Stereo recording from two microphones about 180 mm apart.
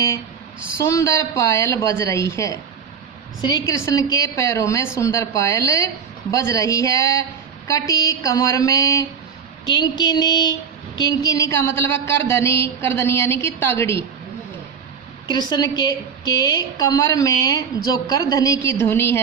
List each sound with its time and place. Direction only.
0.8 s a woman's voice: 15° left (ahead or behind)
15.3 s a woman's voice: 25° left (ahead or behind)